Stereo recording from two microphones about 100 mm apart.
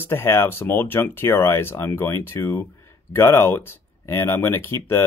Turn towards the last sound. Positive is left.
turn(degrees=25)  # may be behind; listen again after turning